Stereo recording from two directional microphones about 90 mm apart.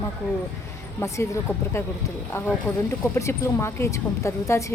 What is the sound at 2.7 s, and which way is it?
Speech, 15° left (ahead or behind).